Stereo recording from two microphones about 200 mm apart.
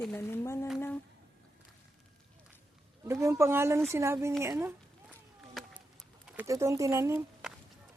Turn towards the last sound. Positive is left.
turn(degrees=-15)  # may be behind; listen again after turning